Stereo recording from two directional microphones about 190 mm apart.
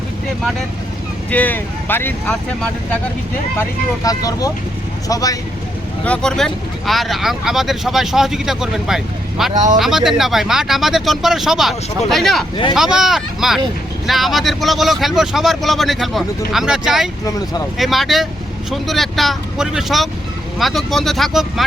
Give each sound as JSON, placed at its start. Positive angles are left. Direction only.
{"t": 1.3, "sound": "speech", "side_deg": 10}
{"t": 3.6, "sound": "speech", "side_deg": 20}
{"t": 6.1, "sound": "speech", "side_deg": 5}